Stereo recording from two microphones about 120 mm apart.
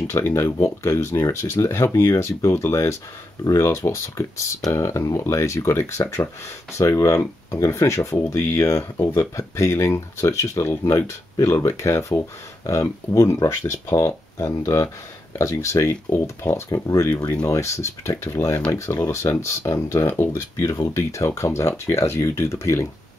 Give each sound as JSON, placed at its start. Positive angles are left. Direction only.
{"t": 0.1, "sound": "speech", "side_deg": 25}